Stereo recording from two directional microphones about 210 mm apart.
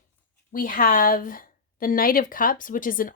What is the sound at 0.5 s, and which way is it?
Speech, 40° left (ahead or behind).